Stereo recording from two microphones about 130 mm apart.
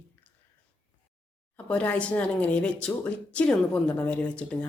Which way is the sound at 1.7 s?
10° left (ahead or behind).